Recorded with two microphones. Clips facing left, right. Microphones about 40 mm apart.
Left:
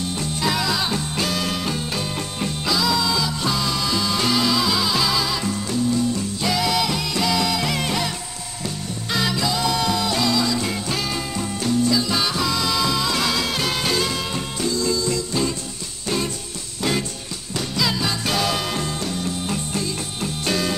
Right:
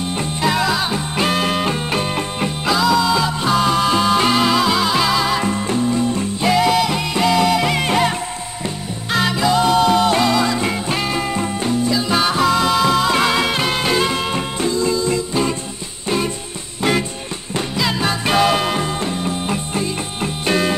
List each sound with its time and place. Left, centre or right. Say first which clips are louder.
0.1 s music: right 4 dB; right
0.5 s music: right 4 dB; centre
1.2 s music: right 9 dB; right
9.1 s music: right 6 dB; right
17.7 s music: right 3 dB; right